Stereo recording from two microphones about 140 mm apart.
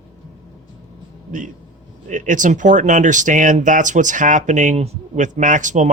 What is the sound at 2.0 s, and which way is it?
Speech, 65° right (ahead or behind).